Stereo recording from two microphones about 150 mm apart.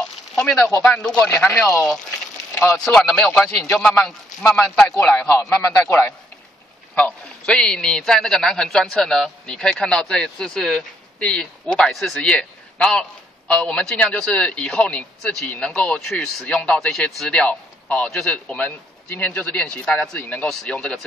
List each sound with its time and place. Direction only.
0.0 s speech: 10° left (ahead or behind)
2.8 s a man's voice: 5° left (ahead or behind)
5.2 s a man's voice: 20° left (ahead or behind)
7.0 s a man's voice: 10° left (ahead or behind)